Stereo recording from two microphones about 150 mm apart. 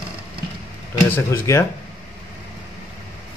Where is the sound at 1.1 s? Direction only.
20° left (ahead or behind).